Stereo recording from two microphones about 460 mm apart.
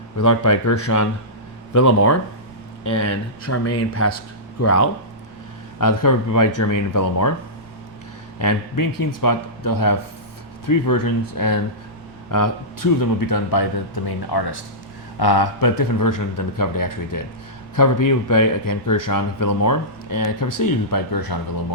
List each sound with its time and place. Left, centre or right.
0.2 s speech: left
8.4 s speech: left